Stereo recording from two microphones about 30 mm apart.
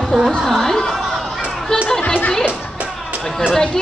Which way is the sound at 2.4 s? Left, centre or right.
Right.